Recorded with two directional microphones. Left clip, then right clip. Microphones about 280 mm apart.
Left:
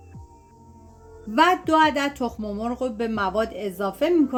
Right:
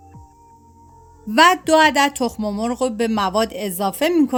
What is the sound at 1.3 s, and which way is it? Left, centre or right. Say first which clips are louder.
Speech: right 5 dB; right.